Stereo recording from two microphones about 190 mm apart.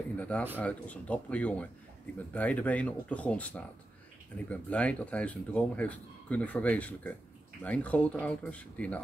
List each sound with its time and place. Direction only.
0.2 s speech: 5° left (ahead or behind)